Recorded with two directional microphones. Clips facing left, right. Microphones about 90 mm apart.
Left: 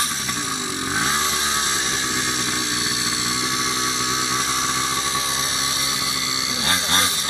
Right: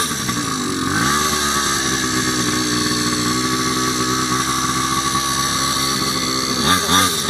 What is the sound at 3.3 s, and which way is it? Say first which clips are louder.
Chainsaw: right 6 dB; 45° right (ahead or behind).